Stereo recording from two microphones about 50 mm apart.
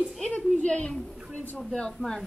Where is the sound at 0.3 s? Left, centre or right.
Left.